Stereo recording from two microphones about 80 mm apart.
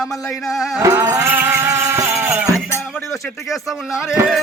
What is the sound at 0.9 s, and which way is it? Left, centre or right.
Music, right.